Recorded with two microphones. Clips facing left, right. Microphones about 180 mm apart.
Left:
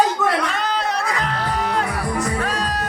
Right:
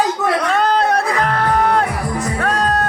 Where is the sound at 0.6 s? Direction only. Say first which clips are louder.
Right 7 dB; 55° right (ahead or behind).